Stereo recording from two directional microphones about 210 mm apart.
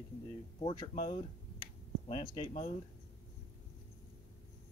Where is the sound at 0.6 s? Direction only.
25° left (ahead or behind).